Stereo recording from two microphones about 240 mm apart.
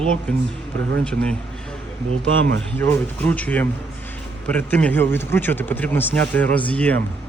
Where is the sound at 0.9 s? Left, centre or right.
Centre.